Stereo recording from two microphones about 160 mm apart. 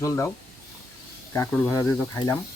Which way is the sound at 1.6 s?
15° left (ahead or behind).